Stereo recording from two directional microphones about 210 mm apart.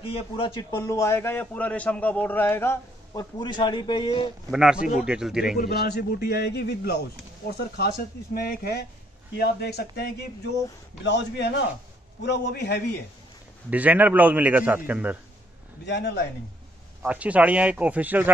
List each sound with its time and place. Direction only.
0.0 s a man's voice: 25° left (ahead or behind)
4.5 s speech: 5° right (ahead or behind)
5.6 s a man's voice: 50° left (ahead or behind)
8.4 s a man's voice: 50° left (ahead or behind)
11.1 s a man's voice: 55° left (ahead or behind)
13.7 s a man's voice: 5° right (ahead or behind)
15.8 s a man's voice: 55° left (ahead or behind)
17.0 s a man's voice: 5° right (ahead or behind)